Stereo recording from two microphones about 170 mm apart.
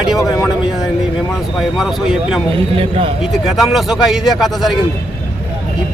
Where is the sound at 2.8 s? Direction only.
35° right (ahead or behind).